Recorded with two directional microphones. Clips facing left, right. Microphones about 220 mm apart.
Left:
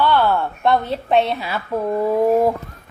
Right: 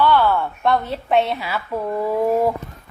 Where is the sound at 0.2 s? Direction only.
15° left (ahead or behind).